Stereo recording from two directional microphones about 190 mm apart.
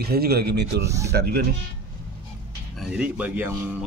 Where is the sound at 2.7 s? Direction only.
5° right (ahead or behind).